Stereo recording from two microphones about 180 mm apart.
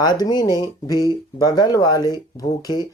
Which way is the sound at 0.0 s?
20° left (ahead or behind).